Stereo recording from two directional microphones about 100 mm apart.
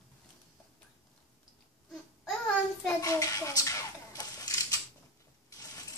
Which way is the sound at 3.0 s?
35° left (ahead or behind).